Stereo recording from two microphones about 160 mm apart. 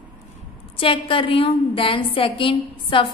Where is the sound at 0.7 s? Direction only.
35° left (ahead or behind).